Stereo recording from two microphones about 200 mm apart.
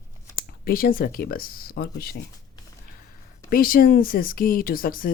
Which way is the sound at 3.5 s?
45° left (ahead or behind).